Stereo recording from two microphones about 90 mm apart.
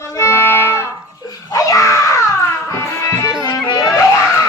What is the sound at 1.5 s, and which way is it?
Dog, 40° left (ahead or behind).